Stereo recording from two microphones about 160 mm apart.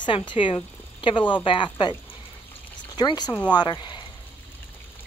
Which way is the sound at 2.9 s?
25° left (ahead or behind).